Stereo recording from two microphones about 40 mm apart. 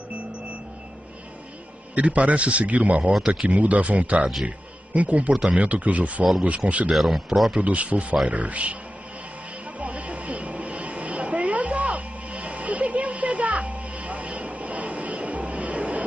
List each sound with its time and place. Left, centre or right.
2.0 s a man's voice: right
6.9 s speech: centre
7.6 s a man's voice: right
9.8 s a sound: right